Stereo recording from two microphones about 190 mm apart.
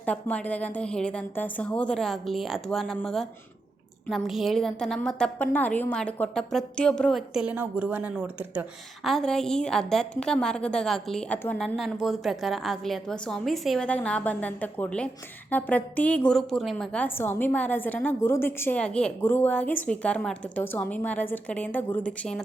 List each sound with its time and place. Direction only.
0.0 s a woman's voice: 5° left (ahead or behind)